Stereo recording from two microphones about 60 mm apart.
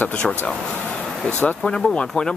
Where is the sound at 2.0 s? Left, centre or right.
Centre.